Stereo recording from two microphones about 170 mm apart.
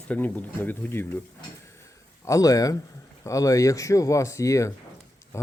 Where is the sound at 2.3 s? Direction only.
20° left (ahead or behind).